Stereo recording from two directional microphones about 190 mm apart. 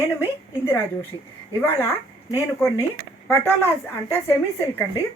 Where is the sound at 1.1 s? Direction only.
25° left (ahead or behind).